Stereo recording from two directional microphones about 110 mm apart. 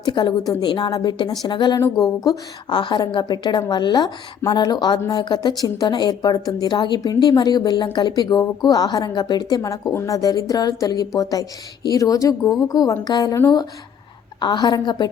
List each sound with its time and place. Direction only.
0.0 s a woman's voice: 40° left (ahead or behind)
9.6 s a woman's voice: 30° left (ahead or behind)
14.3 s a woman's voice: 45° left (ahead or behind)